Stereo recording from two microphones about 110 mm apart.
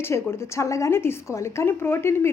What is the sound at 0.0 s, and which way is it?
A woman's voice, 25° left (ahead or behind).